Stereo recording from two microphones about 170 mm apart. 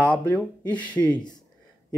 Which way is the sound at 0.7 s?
10° left (ahead or behind).